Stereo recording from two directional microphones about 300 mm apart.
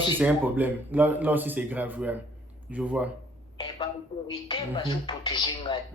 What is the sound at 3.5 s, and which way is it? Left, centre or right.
A man's voice, centre.